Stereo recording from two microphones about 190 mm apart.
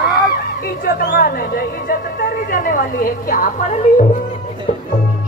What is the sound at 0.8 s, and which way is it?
Speech, 50° left (ahead or behind).